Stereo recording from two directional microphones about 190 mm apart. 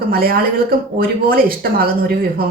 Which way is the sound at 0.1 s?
50° right (ahead or behind).